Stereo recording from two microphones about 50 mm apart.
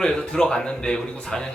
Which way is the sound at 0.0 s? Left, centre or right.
Centre.